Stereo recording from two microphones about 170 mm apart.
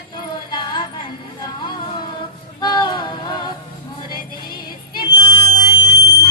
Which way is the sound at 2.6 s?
25° left (ahead or behind).